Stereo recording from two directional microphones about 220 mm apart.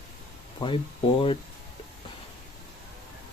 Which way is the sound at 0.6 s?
20° left (ahead or behind).